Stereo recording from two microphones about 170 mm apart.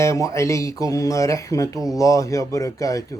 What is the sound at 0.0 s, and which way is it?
A man's voice, 20° left (ahead or behind).